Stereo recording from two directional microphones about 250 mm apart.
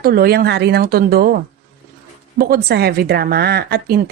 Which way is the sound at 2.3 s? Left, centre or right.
Right.